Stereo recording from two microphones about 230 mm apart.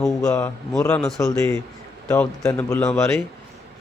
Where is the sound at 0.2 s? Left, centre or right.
Centre.